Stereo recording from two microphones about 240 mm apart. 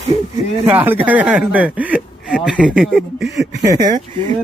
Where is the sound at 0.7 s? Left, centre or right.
Centre.